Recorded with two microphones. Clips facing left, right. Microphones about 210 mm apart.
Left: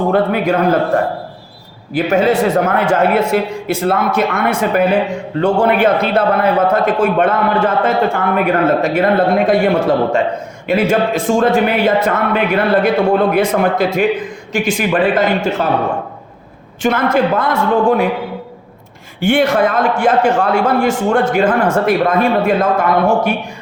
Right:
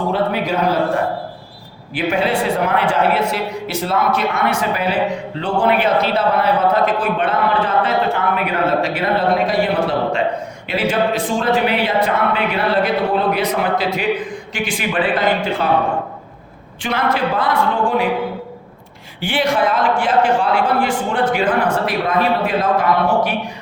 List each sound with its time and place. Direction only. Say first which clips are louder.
0.1 s a man's voice: left 4 dB; 55° left (ahead or behind)
1.9 s a man's voice: left 5 dB; 40° left (ahead or behind)
16.8 s a man's voice: left 6 dB; 45° left (ahead or behind)
19.2 s a man's voice: left 5 dB; 45° left (ahead or behind)